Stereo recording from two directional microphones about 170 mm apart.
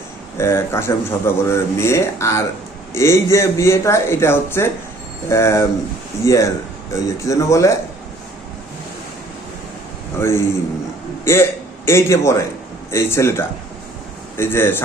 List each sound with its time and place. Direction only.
0.3 s a man's voice: 15° left (ahead or behind)
10.2 s a man's voice: 15° left (ahead or behind)